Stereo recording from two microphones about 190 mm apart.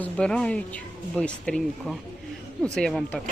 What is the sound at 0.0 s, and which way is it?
Speech, 5° left (ahead or behind).